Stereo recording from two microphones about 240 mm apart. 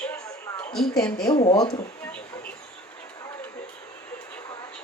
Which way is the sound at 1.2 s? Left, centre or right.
Centre.